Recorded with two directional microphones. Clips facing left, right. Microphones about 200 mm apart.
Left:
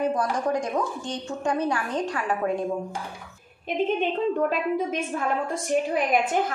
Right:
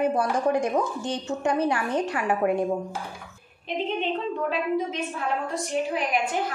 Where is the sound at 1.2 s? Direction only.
25° right (ahead or behind).